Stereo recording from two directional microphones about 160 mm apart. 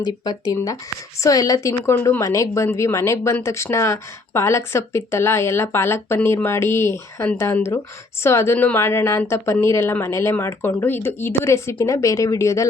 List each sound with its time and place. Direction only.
0.0 s a woman's voice: 25° left (ahead or behind)